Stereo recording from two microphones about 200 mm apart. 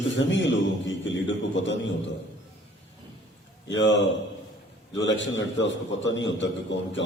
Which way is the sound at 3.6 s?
65° left (ahead or behind).